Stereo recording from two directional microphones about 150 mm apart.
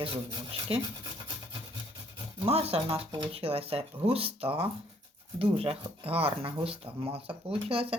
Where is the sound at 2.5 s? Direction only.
40° right (ahead or behind).